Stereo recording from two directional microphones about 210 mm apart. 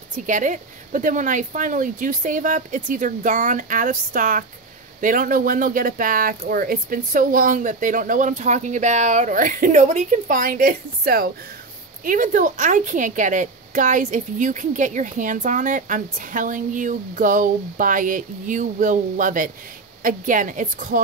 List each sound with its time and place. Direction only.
0.3 s a woman's voice: 40° right (ahead or behind)